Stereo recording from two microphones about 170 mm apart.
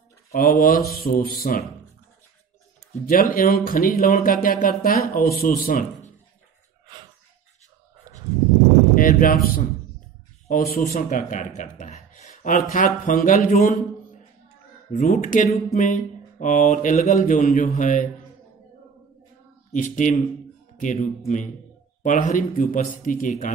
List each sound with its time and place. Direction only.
0.3 s speech: 60° left (ahead or behind)
2.9 s speech: 55° left (ahead or behind)
8.9 s speech: 55° left (ahead or behind)
14.9 s speech: 45° left (ahead or behind)
19.7 s speech: 50° left (ahead or behind)